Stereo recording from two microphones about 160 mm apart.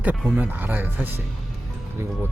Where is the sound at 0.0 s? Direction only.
10° right (ahead or behind).